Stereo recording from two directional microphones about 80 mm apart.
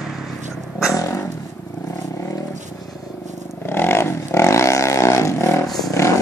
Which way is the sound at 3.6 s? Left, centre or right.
Left.